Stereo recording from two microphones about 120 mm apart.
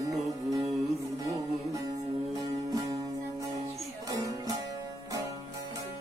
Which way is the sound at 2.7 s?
30° right (ahead or behind).